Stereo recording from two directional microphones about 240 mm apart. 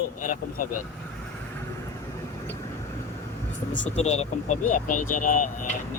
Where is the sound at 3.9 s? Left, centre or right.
Left.